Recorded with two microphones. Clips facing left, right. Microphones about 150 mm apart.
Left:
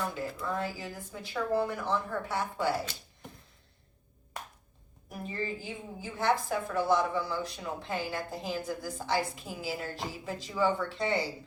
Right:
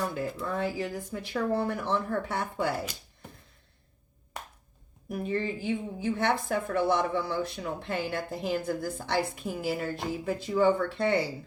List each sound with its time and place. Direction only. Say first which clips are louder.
0.1 s a woman's voice: right 2 dB; 60° right (ahead or behind)
5.2 s a woman's voice: right 5 dB; 65° right (ahead or behind)